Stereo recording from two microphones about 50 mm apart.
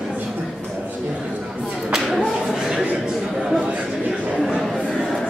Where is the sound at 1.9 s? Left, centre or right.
Centre.